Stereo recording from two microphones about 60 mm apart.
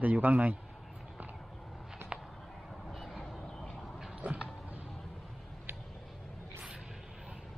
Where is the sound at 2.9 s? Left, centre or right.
Centre.